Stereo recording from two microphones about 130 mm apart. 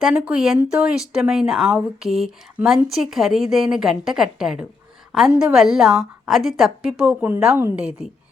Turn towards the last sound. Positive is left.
turn(degrees=-10)  # may be behind; listen again after turning